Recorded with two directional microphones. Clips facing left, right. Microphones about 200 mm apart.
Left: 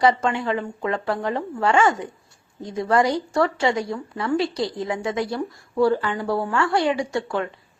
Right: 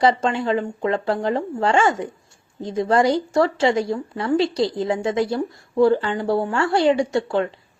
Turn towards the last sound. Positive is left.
turn(degrees=-25)  # may be behind; listen again after turning